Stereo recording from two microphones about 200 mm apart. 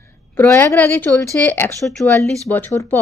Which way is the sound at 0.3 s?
10° left (ahead or behind).